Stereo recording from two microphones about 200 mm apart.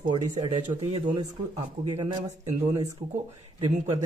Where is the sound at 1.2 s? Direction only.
20° right (ahead or behind).